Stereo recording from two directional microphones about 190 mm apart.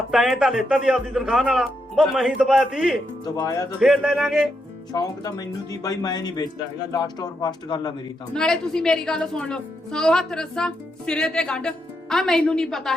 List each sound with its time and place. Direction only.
0.1 s a woman's voice: centre (ahead or behind)
3.2 s speech: 20° left (ahead or behind)
3.8 s a woman's voice: centre (ahead or behind)
4.9 s speech: 20° left (ahead or behind)
8.3 s a woman's voice: 5° left (ahead or behind)